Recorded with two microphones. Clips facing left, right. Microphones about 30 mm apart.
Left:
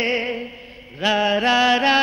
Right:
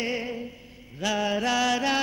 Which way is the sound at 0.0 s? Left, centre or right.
Left.